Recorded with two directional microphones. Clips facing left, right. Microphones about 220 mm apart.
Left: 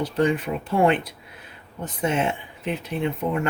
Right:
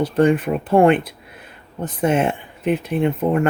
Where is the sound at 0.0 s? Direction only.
50° right (ahead or behind).